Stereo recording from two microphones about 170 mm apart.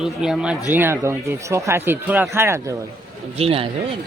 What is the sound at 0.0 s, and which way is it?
Speech, 5° right (ahead or behind).